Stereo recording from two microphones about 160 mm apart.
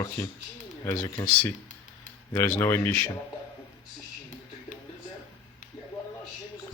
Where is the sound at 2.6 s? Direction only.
15° left (ahead or behind).